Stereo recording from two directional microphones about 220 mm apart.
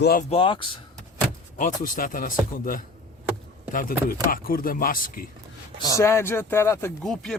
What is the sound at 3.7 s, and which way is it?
Speech, 40° left (ahead or behind).